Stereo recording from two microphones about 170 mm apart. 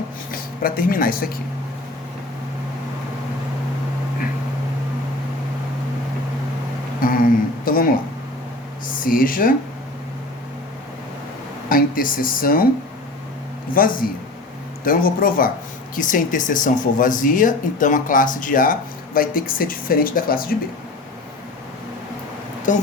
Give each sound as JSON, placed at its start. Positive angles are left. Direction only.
{"t": 0.3, "sound": "speech", "side_deg": 60}
{"t": 7.0, "sound": "a sound", "side_deg": 55}
{"t": 8.9, "sound": "speech", "side_deg": 55}
{"t": 11.7, "sound": "speech", "side_deg": 55}
{"t": 13.7, "sound": "speech", "side_deg": 55}
{"t": 22.7, "sound": "speech", "side_deg": 50}